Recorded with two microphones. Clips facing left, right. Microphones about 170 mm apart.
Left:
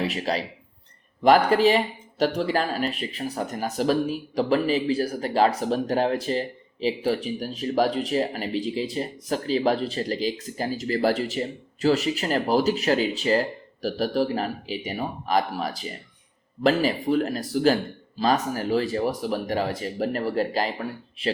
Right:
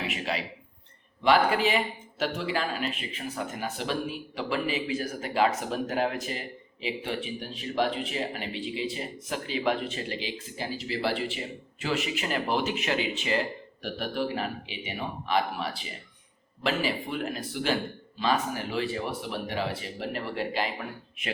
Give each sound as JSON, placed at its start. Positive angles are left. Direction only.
{"t": 0.1, "sound": "speech", "side_deg": 40}